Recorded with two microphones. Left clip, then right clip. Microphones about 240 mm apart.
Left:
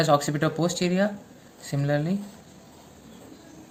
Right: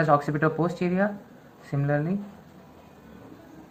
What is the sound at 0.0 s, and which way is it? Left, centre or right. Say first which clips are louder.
Speech: even; left.